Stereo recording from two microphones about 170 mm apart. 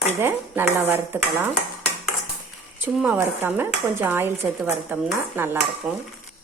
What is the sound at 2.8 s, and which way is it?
A woman's voice, 10° right (ahead or behind).